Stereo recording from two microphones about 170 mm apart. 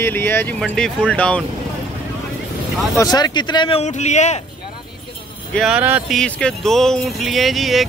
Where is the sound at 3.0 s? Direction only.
25° left (ahead or behind); by 4.4 s 40° left (ahead or behind).